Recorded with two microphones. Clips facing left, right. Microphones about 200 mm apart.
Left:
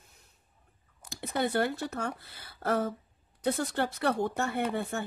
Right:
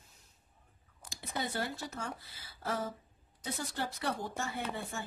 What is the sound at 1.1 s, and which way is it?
Speech, 60° left (ahead or behind).